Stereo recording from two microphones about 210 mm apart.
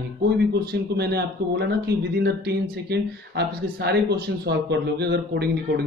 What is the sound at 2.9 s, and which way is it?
Speech, 50° right (ahead or behind).